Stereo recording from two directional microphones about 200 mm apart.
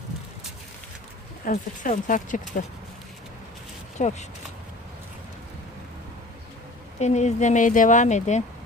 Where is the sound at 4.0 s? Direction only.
35° left (ahead or behind).